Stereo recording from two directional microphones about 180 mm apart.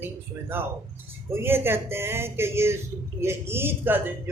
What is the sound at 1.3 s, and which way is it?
Speech, 15° right (ahead or behind).